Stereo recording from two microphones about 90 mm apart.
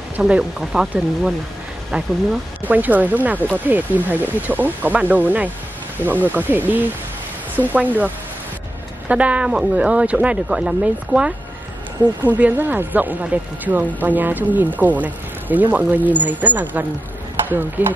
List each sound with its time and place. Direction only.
0.2 s speech: 5° right (ahead or behind)
2.6 s speech: 20° right (ahead or behind)
9.1 s speech: 15° right (ahead or behind)